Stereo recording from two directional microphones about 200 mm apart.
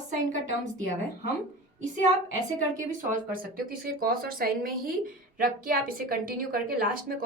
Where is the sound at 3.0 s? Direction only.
45° right (ahead or behind).